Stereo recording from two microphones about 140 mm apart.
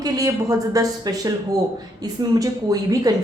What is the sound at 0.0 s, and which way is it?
A woman's voice, 25° right (ahead or behind).